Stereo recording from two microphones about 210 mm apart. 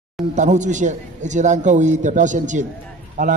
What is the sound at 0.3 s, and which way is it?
A man's voice, 35° right (ahead or behind).